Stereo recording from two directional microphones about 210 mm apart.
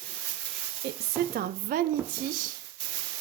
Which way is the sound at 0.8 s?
50° right (ahead or behind).